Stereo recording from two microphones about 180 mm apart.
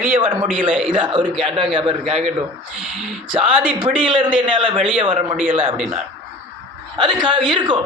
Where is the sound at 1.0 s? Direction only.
25° right (ahead or behind).